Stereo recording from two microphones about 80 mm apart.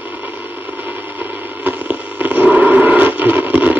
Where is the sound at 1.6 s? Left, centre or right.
Right.